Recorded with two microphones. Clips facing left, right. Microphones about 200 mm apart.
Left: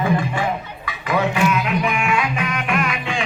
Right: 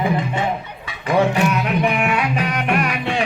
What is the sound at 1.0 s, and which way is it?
Music, 35° right (ahead or behind).